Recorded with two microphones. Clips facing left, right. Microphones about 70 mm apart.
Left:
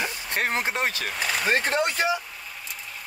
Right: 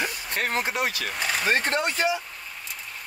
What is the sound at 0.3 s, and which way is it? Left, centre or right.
Speech, left.